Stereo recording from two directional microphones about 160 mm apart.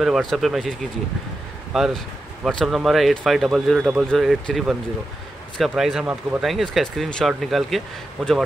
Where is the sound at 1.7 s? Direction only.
Centre (ahead or behind).